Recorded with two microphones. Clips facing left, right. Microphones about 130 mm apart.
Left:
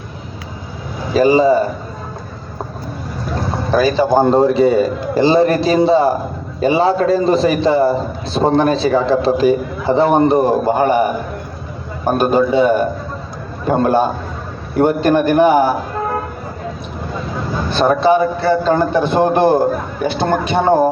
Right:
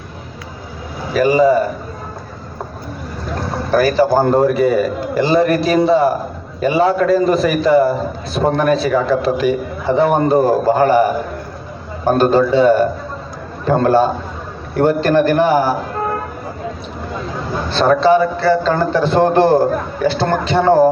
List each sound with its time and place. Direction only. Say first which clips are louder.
1.1 s a man's voice: left 1 dB; 30° left (ahead or behind)
3.7 s a man's voice: right 1 dB; 20° left (ahead or behind)
12.0 s a man's voice: right 1 dB; 15° left (ahead or behind)
17.7 s a man's voice: right 1 dB; 15° left (ahead or behind)